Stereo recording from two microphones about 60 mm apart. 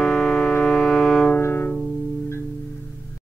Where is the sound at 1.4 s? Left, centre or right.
Left.